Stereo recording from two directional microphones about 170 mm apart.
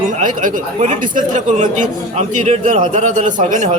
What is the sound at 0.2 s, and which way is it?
Speech, 50° right (ahead or behind).